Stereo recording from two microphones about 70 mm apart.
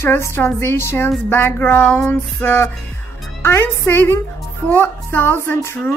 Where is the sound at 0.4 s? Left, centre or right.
Left.